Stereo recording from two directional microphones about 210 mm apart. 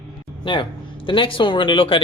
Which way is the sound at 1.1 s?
25° left (ahead or behind).